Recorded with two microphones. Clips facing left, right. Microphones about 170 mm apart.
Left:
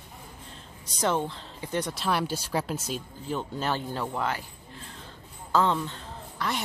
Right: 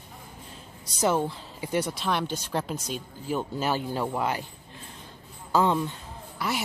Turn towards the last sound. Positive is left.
turn(degrees=-10)  # may be behind; listen again after turning